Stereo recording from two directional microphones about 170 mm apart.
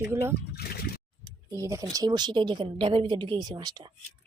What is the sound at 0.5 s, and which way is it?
Speech, 65° left (ahead or behind).